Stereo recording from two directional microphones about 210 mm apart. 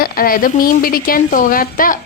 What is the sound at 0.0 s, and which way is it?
Speech, 45° left (ahead or behind).